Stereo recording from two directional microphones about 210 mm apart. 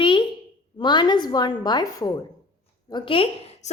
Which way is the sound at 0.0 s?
25° left (ahead or behind).